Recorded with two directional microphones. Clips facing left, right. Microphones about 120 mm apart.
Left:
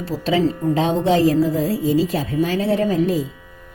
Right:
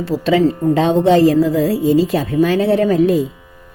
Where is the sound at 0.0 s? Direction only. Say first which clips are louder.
Right 5 dB; 65° right (ahead or behind).